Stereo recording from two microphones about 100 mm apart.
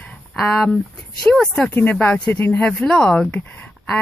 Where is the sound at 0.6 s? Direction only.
5° left (ahead or behind).